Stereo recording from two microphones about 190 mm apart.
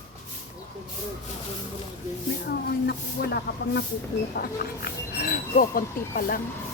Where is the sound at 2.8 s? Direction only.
60° left (ahead or behind).